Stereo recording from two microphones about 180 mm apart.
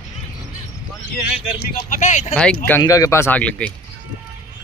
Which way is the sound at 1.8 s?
45° left (ahead or behind).